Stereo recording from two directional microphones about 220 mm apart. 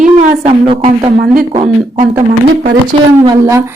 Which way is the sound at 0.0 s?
25° right (ahead or behind).